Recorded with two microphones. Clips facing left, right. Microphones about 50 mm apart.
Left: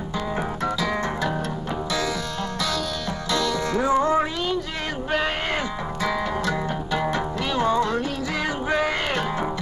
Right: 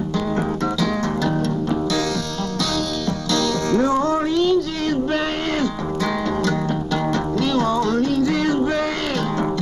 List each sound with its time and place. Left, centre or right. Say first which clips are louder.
3.3 s music: right 4 dB; centre